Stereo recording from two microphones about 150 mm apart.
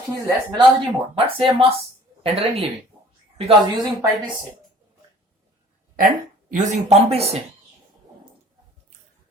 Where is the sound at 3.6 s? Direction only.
25° right (ahead or behind).